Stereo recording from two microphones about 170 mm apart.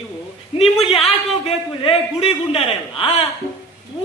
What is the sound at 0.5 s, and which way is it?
A man's voice, 35° left (ahead or behind).